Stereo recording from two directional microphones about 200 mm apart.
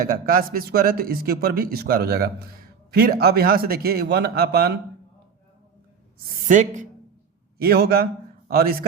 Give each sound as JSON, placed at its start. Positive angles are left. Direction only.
{"t": 0.0, "sound": "speech", "side_deg": -45}
{"t": 6.5, "sound": "speech", "side_deg": -35}
{"t": 7.6, "sound": "speech", "side_deg": -50}